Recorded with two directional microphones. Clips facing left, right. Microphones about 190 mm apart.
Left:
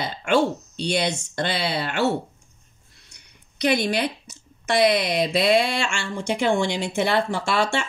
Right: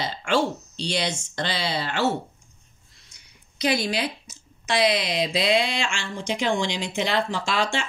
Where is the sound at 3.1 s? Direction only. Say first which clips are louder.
Left 4 dB; 65° left (ahead or behind).